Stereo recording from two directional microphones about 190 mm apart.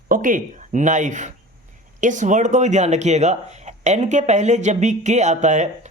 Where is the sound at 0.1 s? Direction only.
45° right (ahead or behind).